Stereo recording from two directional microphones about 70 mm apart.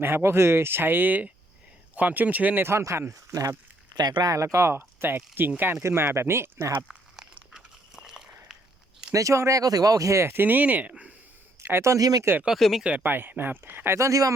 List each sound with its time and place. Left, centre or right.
0.0 s speech: right
2.6 s speech: right
3.9 s speech: right
4.3 s speech: right
7.3 s a sound: centre
9.1 s speech: right
10.3 s speech: right
11.6 s speech: right
12.5 s speech: centre
13.0 s speech: right
14.0 s speech: right